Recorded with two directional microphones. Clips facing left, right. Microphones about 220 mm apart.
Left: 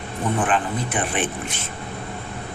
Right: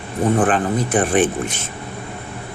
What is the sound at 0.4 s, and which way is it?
Speech, 40° right (ahead or behind).